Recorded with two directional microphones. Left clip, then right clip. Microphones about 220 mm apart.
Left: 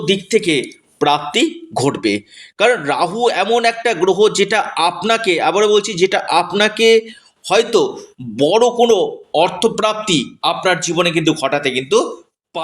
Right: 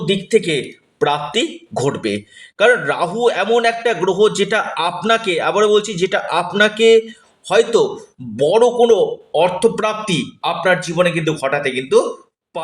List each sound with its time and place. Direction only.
0.0 s a man's voice: 30° left (ahead or behind)